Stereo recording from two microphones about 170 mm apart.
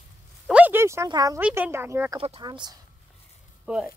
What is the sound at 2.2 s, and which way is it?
Speech, 30° right (ahead or behind).